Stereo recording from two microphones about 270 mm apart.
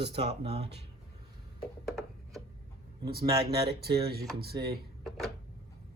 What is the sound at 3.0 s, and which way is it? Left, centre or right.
Speech, right.